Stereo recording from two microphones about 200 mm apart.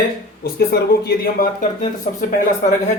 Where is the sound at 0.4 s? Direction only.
50° left (ahead or behind).